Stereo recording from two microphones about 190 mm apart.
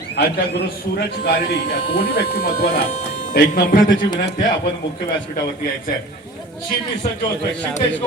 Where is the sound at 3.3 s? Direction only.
50° left (ahead or behind).